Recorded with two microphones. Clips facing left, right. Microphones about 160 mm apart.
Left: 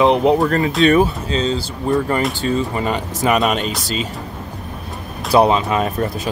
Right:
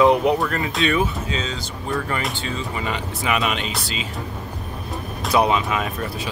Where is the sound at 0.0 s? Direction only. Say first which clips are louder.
Left 3 dB; 25° left (ahead or behind); by 4.1 s 45° left (ahead or behind).